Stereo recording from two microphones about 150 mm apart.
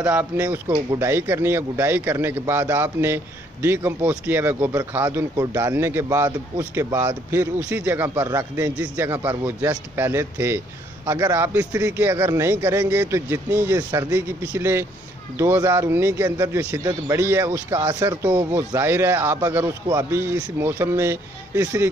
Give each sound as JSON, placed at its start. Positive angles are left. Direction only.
{"t": 0.0, "sound": "a man's voice", "side_deg": -10}